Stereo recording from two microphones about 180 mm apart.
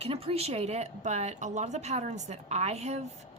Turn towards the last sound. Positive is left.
turn(degrees=-35)  # may be behind; listen again after turning